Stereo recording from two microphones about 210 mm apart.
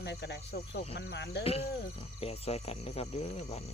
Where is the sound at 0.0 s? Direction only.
50° left (ahead or behind).